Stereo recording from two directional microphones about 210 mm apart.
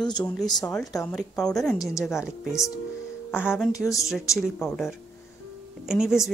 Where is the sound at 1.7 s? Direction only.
15° left (ahead or behind).